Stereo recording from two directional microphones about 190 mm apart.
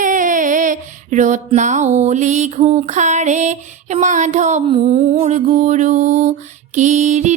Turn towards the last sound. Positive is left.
turn(degrees=-40)  # may be behind; listen again after turning